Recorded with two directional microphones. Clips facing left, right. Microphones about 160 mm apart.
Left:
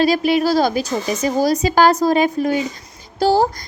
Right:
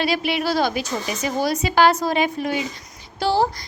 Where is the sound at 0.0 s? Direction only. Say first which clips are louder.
Left 7 dB; 40° left (ahead or behind).